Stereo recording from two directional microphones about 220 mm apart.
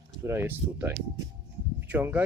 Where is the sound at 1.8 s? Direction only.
10° right (ahead or behind).